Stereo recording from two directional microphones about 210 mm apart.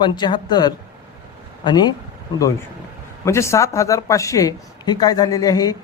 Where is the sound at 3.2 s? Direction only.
15° left (ahead or behind).